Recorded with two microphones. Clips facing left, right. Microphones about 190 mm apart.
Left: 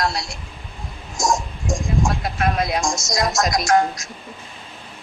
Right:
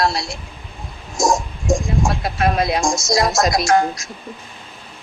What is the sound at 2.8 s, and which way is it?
Speech, 30° right (ahead or behind).